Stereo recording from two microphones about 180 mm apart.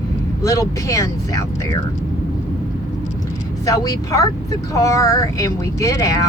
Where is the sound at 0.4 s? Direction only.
20° left (ahead or behind).